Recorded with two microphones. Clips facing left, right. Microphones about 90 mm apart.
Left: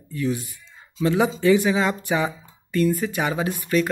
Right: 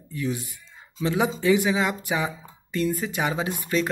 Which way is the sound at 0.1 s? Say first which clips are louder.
Left 3 dB; 15° right (ahead or behind).